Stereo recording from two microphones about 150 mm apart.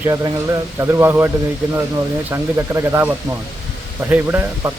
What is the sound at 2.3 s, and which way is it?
Speech, 15° right (ahead or behind).